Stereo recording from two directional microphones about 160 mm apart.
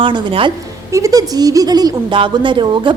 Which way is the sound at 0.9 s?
20° right (ahead or behind).